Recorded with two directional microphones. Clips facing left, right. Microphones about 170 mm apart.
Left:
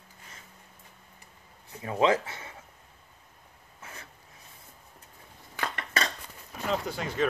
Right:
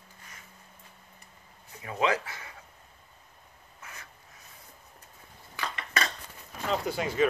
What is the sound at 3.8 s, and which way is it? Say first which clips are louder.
Writing: left 2 dB; 30° left (ahead or behind).